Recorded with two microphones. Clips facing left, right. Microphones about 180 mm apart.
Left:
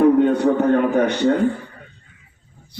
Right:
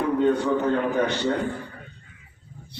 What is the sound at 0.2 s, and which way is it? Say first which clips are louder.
A man's voice: left 5 dB; 55° left (ahead or behind).